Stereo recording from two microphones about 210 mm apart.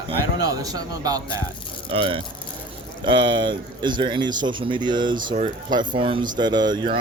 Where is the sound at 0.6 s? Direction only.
15° right (ahead or behind).